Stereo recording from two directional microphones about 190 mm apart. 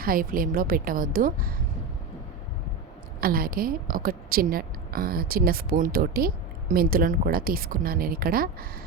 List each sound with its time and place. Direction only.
0.0 s a woman's voice: 50° right (ahead or behind)
3.2 s a woman's voice: 50° right (ahead or behind)